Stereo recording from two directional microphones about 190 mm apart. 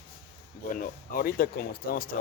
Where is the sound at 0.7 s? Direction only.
45° left (ahead or behind).